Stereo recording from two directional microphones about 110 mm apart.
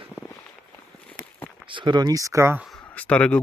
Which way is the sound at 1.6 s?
45° right (ahead or behind).